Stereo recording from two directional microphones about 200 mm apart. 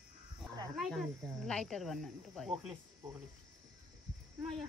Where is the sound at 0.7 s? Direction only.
Centre (ahead or behind).